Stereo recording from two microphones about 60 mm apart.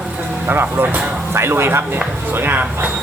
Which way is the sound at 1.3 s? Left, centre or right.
Right.